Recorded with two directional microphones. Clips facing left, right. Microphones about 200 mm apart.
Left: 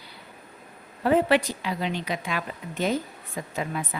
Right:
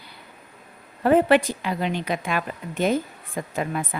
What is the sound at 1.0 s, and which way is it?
A woman's voice, 55° right (ahead or behind).